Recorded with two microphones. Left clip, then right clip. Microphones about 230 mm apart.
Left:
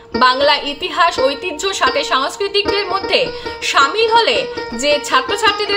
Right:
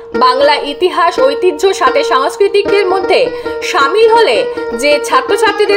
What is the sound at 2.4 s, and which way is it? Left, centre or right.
Speech, left.